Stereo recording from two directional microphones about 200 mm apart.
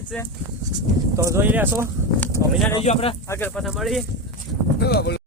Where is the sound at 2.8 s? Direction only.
30° left (ahead or behind).